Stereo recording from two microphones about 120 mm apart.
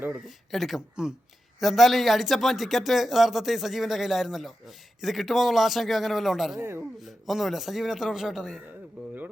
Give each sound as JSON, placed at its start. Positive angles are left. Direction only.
{"t": 0.5, "sound": "speech", "side_deg": 0}
{"t": 6.6, "sound": "speech", "side_deg": -20}
{"t": 7.0, "sound": "speech", "side_deg": 0}